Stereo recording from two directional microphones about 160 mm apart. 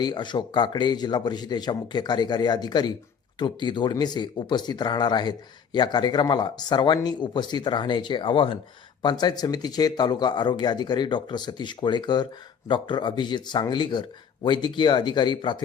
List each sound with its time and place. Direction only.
0.0 s speech: 25° left (ahead or behind)